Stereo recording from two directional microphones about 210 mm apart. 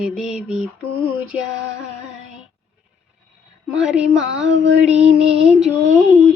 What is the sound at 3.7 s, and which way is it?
Music, 5° right (ahead or behind).